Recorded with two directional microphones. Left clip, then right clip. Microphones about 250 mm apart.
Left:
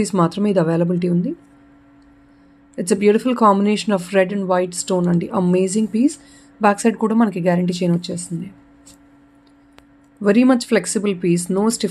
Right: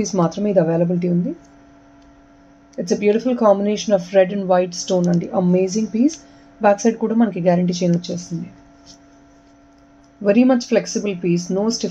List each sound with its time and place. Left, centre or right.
0.0 s speech: left
2.7 s speech: left
10.2 s speech: left